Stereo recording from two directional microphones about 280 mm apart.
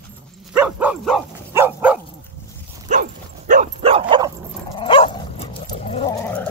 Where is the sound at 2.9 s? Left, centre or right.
Right.